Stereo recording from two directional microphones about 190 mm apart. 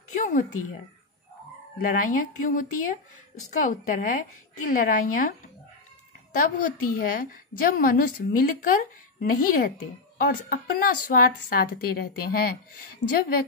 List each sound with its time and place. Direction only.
0.1 s a sound: 40° left (ahead or behind)
1.8 s a woman's voice: 45° left (ahead or behind)
6.3 s a woman's voice: 45° left (ahead or behind)